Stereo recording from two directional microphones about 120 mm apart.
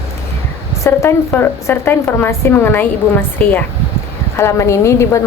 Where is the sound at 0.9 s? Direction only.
20° left (ahead or behind).